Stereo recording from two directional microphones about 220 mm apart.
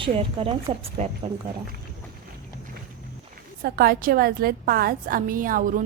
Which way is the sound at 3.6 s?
45° right (ahead or behind).